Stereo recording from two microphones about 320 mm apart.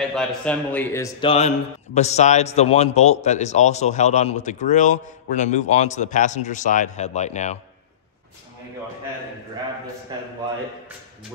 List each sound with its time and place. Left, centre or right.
0.1 s a man's voice: centre; by 7.5 s left